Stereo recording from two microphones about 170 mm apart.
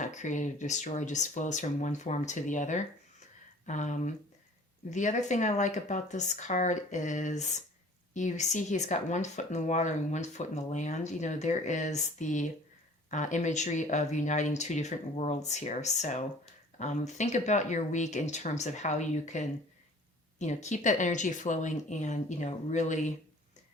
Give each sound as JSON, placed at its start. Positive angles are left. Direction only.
{"t": 0.0, "sound": "speech", "side_deg": 45}